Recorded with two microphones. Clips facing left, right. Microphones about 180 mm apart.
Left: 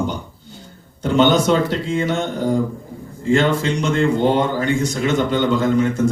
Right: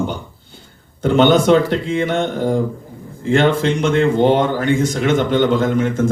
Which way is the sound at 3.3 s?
55° right (ahead or behind).